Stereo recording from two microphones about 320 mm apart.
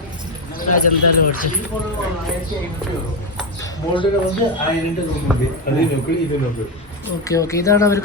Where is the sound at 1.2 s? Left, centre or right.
Left.